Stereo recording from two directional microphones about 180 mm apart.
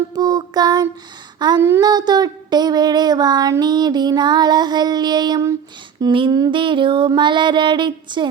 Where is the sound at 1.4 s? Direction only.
20° right (ahead or behind).